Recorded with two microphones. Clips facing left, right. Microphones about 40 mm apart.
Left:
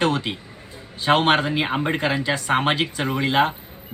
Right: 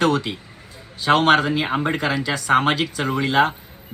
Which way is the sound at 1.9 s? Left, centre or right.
Left.